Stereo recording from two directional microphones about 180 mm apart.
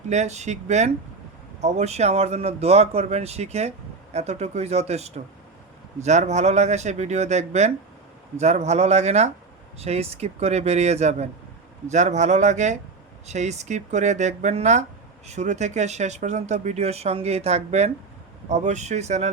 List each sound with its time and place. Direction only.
0.1 s a man's voice: 40° right (ahead or behind)